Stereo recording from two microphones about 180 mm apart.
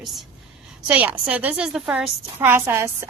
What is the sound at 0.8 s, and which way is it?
A woman's voice, 5° right (ahead or behind).